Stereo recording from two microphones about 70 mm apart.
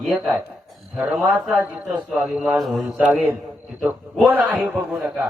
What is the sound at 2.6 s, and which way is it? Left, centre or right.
Mantra, centre.